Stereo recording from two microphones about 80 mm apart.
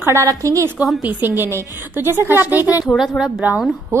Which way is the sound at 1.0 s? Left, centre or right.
Right.